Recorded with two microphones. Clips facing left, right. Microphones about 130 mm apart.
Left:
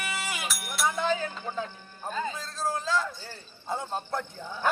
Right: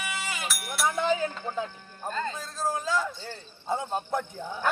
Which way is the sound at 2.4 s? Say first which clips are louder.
Right 1 dB; 15° right (ahead or behind).